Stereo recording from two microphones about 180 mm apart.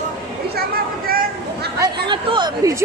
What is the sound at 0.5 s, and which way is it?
Chatter, 60° right (ahead or behind).